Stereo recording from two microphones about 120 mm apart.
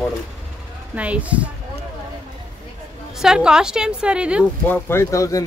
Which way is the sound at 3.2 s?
5° right (ahead or behind).